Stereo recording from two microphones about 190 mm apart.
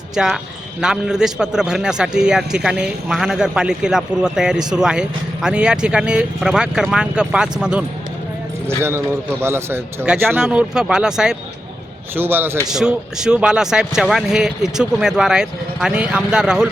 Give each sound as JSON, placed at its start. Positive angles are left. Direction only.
{"t": 0.1, "sound": "a man's voice", "side_deg": 0}